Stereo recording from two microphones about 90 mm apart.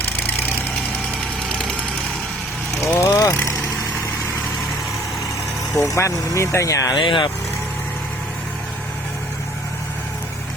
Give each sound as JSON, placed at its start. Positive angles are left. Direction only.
{"t": 2.8, "sound": "vehicle", "side_deg": 35}
{"t": 5.8, "sound": "speech", "side_deg": 35}
{"t": 6.9, "sound": "speech", "side_deg": 65}